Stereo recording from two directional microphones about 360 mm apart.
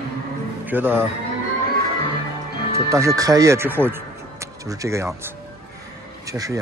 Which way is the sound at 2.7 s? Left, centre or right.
Centre.